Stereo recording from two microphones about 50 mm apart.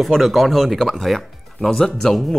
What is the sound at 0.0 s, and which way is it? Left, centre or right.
Speech, centre.